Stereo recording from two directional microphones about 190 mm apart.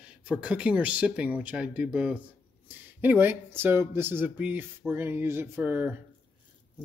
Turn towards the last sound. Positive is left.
turn(degrees=-10)  # may be behind; listen again after turning